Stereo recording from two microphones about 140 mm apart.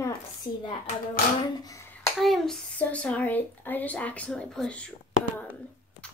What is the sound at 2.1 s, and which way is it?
A child's voice, centre (ahead or behind).